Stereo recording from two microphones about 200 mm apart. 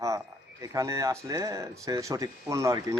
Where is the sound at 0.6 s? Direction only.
15° right (ahead or behind).